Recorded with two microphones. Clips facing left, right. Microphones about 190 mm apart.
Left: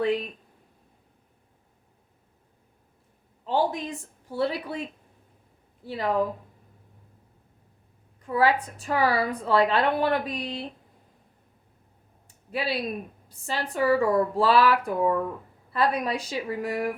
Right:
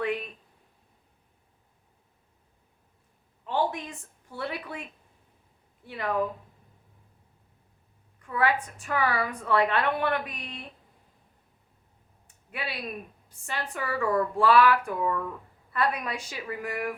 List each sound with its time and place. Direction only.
0.0 s speech: 30° left (ahead or behind)
3.4 s a woman's voice: 35° left (ahead or behind)
8.2 s a woman's voice: 30° left (ahead or behind)
12.5 s a woman's voice: 30° left (ahead or behind)